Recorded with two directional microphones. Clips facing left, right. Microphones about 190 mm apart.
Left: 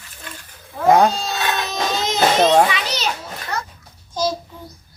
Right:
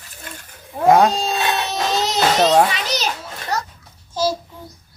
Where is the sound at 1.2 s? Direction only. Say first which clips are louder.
Right 2 dB; 35° right (ahead or behind).